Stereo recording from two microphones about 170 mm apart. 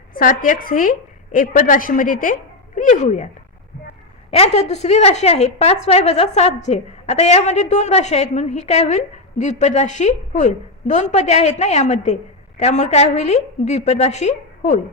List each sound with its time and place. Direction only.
0.1 s a woman's voice: 50° left (ahead or behind)
4.3 s a woman's voice: 40° left (ahead or behind)